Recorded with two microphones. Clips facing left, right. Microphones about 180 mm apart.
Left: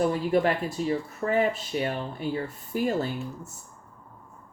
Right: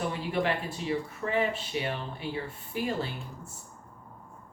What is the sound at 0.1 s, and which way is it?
Speech, 40° left (ahead or behind).